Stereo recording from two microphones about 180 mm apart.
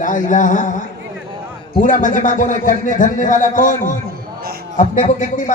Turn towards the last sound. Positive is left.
turn(degrees=45)  # may be behind; listen again after turning